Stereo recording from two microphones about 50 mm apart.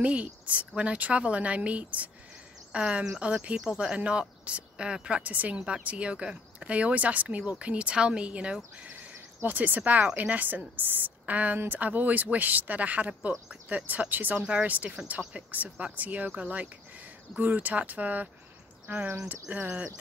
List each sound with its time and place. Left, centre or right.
0.0 s a woman's voice: right
5.2 s a woman's voice: right
9.4 s speech: right
14.4 s a woman's voice: right